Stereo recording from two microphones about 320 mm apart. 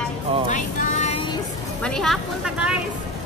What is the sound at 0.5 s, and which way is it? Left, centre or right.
Vehicle, left.